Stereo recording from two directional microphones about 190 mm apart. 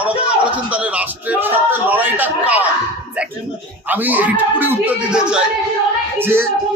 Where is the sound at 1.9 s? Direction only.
10° right (ahead or behind).